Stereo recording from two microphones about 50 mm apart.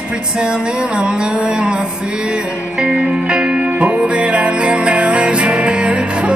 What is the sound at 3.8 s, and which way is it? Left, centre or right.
Music, right.